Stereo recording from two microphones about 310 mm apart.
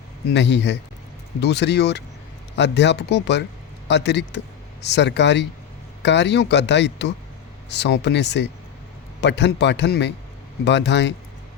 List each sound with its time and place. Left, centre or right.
0.3 s speech: left